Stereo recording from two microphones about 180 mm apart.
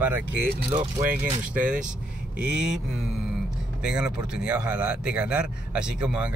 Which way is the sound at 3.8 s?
5° right (ahead or behind).